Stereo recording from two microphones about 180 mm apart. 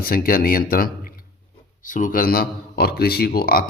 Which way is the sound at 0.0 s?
55° left (ahead or behind).